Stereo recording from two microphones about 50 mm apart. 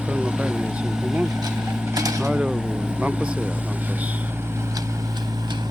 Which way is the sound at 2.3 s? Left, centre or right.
Centre.